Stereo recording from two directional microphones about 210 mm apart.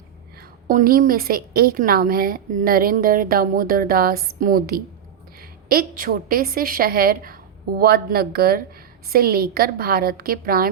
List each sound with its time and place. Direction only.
0.7 s a woman's voice: 40° right (ahead or behind)